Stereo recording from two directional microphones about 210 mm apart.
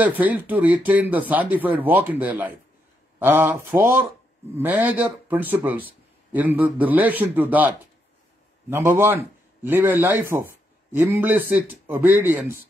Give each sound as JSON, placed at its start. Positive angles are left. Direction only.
{"t": 0.0, "sound": "a man's voice", "side_deg": -10}